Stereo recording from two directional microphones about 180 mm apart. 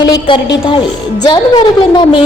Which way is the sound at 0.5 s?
25° left (ahead or behind).